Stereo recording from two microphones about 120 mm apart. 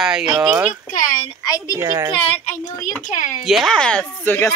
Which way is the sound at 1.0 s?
90° left.